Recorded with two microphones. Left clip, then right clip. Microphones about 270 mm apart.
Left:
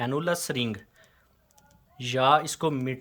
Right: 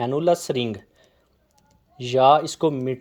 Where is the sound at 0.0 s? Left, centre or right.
Centre.